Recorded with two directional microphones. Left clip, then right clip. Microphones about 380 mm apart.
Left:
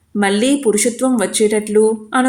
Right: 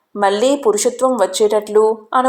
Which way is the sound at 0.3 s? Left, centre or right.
Left.